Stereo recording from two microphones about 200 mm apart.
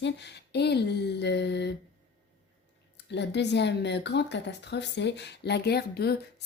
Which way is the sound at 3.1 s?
60° left (ahead or behind).